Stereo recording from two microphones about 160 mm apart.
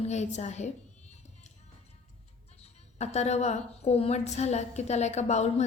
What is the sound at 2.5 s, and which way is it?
A woman's voice, 40° left (ahead or behind).